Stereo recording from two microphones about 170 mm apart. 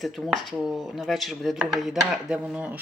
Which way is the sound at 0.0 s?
Centre (ahead or behind).